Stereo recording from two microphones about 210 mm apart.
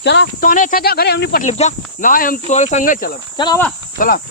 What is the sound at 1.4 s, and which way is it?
Speech, 35° left (ahead or behind).